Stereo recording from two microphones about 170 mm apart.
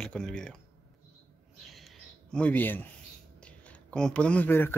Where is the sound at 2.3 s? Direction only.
10° left (ahead or behind).